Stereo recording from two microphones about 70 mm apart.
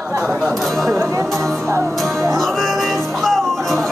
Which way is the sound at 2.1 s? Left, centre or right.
Right.